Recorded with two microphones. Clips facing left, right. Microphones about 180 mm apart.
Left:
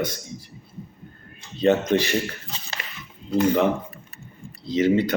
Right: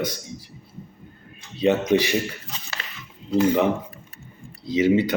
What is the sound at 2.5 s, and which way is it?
Speech, 30° left (ahead or behind).